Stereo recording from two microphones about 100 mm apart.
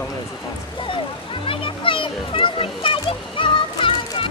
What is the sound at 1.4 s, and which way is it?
A child's voice, 60° left (ahead or behind).